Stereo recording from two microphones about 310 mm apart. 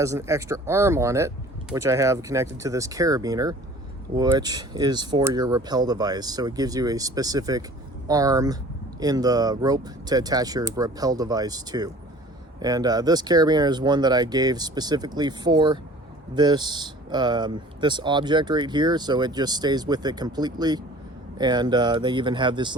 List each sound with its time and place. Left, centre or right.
0.0 s speech: centre